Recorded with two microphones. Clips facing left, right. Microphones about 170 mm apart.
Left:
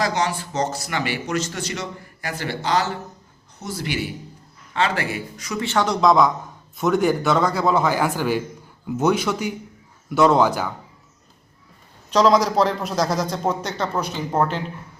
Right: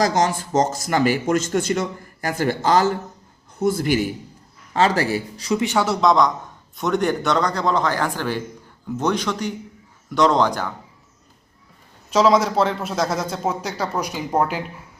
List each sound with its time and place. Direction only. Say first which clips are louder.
0.0 s speech: right 3 dB; 45° right (ahead or behind)
5.5 s a man's voice: even; 10° right (ahead or behind); by 10.7 s 10° left (ahead or behind)
12.1 s a man's voice: even; 5° right (ahead or behind)